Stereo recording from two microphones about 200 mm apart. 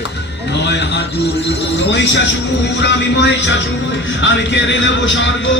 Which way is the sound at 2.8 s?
60° left (ahead or behind).